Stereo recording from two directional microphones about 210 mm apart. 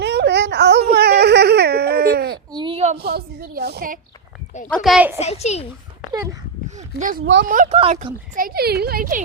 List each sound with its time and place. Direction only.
0.0 s a sound: 55° right (ahead or behind)
2.5 s a sound: 20° right (ahead or behind)
3.0 s a woman's voice: 50° right (ahead or behind)
4.7 s a woman's voice: centre (ahead or behind)
5.2 s a child's voice: 30° left (ahead or behind)
6.7 s speech: 35° right (ahead or behind)
7.8 s speech: 30° right (ahead or behind)